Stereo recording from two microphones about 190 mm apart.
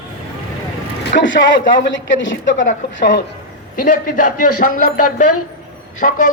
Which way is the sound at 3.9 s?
45° left (ahead or behind).